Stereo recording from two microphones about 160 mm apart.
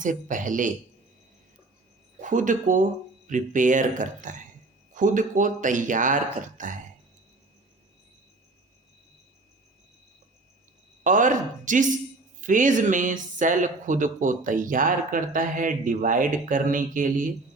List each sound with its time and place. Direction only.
0.0 s speech: 55° right (ahead or behind)
2.2 s speech: 55° right (ahead or behind)
11.0 s speech: 55° right (ahead or behind)